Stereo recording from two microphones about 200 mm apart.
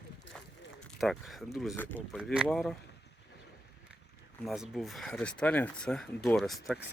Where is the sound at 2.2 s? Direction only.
5° right (ahead or behind).